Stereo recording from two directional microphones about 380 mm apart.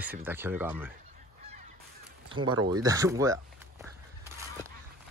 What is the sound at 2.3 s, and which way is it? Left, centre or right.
Speech, centre.